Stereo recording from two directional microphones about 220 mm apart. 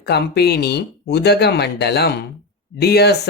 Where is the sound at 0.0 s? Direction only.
50° left (ahead or behind).